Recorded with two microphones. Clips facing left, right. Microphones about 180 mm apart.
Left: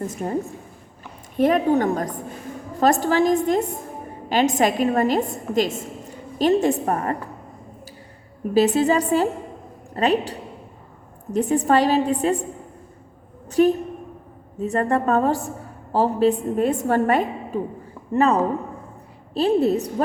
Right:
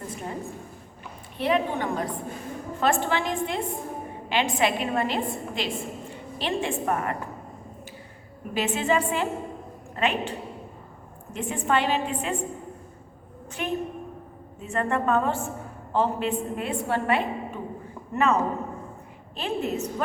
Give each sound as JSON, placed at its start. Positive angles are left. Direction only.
{"t": 0.1, "sound": "a woman's voice", "side_deg": 45}
{"t": 1.4, "sound": "a woman's voice", "side_deg": 45}
{"t": 8.5, "sound": "a woman's voice", "side_deg": 40}
{"t": 13.5, "sound": "a woman's voice", "side_deg": 40}